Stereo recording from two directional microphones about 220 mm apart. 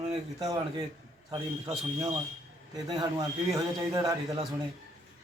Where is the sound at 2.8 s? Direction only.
15° right (ahead or behind).